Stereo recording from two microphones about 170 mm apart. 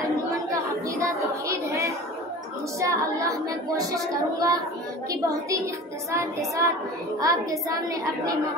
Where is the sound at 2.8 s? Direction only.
20° right (ahead or behind).